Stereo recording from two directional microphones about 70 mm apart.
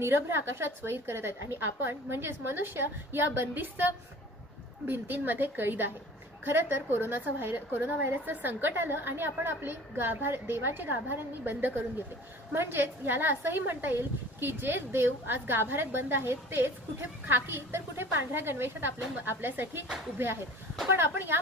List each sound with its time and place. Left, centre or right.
0.0 s a woman's voice: right
4.8 s a woman's voice: right
20.9 s a woman's voice: right